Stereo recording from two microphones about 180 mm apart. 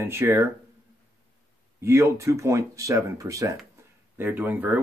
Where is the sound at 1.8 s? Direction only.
15° right (ahead or behind).